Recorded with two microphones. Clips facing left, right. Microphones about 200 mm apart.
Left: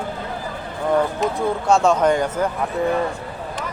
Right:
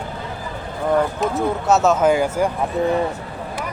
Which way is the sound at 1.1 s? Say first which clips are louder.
Right 1 dB; 5° right (ahead or behind).